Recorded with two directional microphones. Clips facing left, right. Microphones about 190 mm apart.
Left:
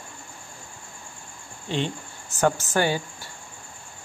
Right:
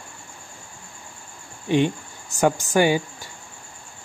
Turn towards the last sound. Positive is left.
turn(degrees=-15)  # may be behind; listen again after turning